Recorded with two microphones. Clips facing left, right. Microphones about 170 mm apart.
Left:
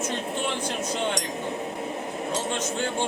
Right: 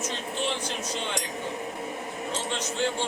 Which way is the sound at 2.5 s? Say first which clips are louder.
Left 1 dB; 50° left (ahead or behind).